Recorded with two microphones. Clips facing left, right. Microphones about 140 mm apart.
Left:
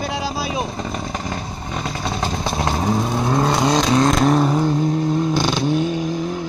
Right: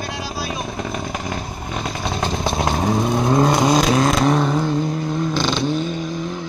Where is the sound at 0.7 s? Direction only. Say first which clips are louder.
Even; 5° right (ahead or behind).